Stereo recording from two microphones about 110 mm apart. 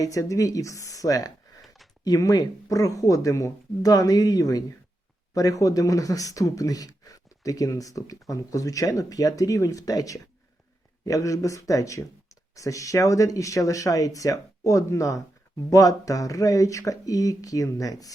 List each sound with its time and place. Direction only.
0.0 s speech: 30° left (ahead or behind)
1.6 s a sound: centre (ahead or behind)
2.0 s speech: 35° left (ahead or behind)